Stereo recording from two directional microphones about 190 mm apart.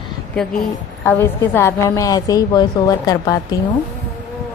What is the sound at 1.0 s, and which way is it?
A woman's voice, 10° left (ahead or behind).